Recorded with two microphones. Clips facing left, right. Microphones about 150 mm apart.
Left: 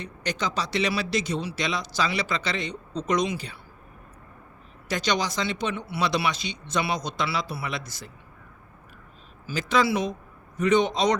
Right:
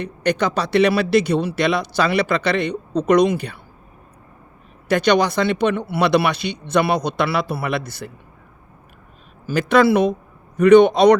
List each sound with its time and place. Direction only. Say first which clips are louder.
0.0 s speech: right 10 dB; 60° right (ahead or behind)
4.9 s speech: right 10 dB; 60° right (ahead or behind)
9.5 s speech: right 9 dB; 60° right (ahead or behind)